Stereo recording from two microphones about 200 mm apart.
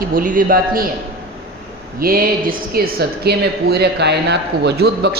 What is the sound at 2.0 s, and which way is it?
Speech, 45° right (ahead or behind).